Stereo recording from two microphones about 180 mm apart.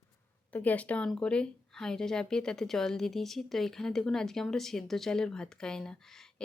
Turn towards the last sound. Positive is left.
turn(degrees=5)  # may be behind; listen again after turning